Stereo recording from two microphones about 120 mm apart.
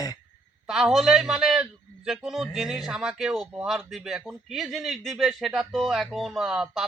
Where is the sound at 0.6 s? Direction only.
5° right (ahead or behind).